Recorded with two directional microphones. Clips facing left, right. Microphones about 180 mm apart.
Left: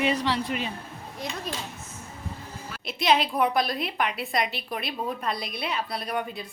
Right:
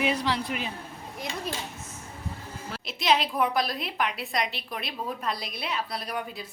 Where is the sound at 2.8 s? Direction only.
Centre (ahead or behind).